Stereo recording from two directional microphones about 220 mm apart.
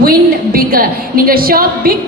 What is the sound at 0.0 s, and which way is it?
A woman's voice, 40° right (ahead or behind).